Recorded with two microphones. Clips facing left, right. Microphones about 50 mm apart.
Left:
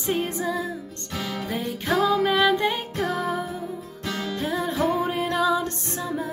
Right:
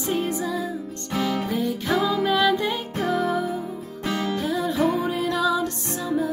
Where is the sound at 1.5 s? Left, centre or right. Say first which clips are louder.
Right 2 dB; left.